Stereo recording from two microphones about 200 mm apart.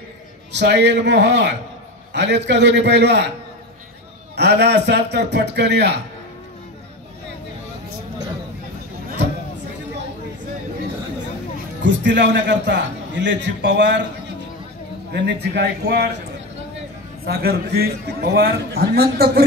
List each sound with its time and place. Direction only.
0.5 s a man's voice: 60° right (ahead or behind)
4.4 s a man's voice: 55° right (ahead or behind)
11.8 s a man's voice: 65° right (ahead or behind)
15.1 s a man's voice: 55° right (ahead or behind)
17.3 s a man's voice: 50° right (ahead or behind)